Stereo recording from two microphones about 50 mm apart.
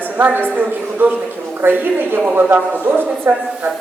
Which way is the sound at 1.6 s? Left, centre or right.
Right.